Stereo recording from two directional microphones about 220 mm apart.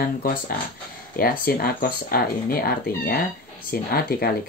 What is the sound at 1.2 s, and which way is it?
Speech, 40° left (ahead or behind).